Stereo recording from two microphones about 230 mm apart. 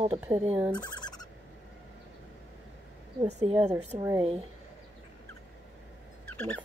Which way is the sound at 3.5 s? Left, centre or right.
Centre.